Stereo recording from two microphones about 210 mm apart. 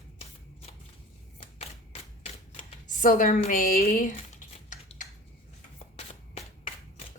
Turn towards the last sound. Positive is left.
turn(degrees=30)  # may be behind; listen again after turning